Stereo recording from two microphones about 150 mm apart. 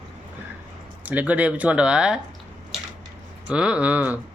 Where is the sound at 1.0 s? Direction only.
10° right (ahead or behind).